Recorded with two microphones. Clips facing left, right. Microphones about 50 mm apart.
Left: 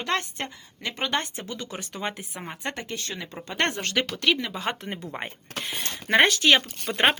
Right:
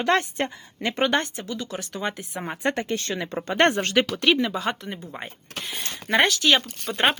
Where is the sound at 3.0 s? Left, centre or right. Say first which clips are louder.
Right 6 dB; right.